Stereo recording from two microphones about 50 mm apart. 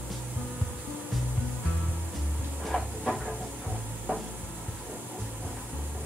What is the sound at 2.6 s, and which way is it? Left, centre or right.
Train, centre.